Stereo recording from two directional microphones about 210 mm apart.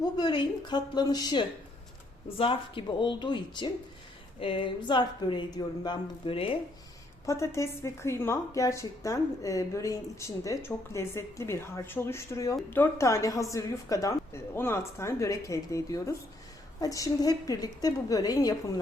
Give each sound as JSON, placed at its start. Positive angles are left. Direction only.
{"t": 0.0, "sound": "speech", "side_deg": 20}
{"t": 7.3, "sound": "speech", "side_deg": 15}